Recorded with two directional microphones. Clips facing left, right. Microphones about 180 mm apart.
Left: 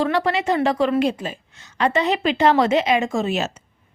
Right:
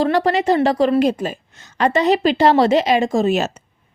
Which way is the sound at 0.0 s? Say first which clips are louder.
Right 4 dB; 40° right (ahead or behind).